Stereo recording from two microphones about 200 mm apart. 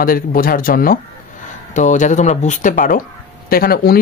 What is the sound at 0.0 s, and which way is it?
Speech, 45° left (ahead or behind).